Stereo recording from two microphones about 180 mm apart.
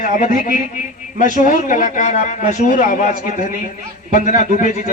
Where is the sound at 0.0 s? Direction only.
45° left (ahead or behind).